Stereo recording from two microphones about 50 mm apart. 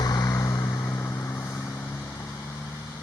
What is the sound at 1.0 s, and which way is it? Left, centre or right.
Vehicle, left.